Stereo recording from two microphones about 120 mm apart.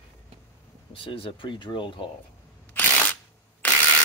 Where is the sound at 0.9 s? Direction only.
50° left (ahead or behind).